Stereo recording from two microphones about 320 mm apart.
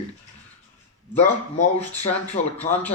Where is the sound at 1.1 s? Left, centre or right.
Left.